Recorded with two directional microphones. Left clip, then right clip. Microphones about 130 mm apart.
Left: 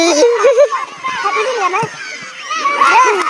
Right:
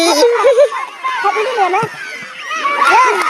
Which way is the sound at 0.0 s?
35° left (ahead or behind).